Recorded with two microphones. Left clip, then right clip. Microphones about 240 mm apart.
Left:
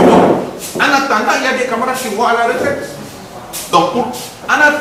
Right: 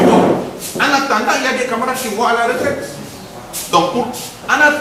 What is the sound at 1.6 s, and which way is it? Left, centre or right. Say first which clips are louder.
Speech: left 2 dB; centre.